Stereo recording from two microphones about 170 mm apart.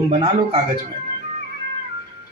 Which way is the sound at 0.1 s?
35° right (ahead or behind).